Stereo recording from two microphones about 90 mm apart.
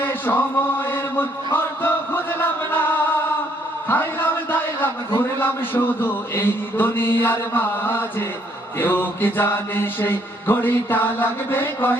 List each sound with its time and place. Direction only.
0.0 s chant: 25° left (ahead or behind)
0.7 s mantra: 25° left (ahead or behind)
1.5 s chant: 25° left (ahead or behind)
3.8 s a sound: 25° left (ahead or behind)
5.4 s mantra: 25° left (ahead or behind)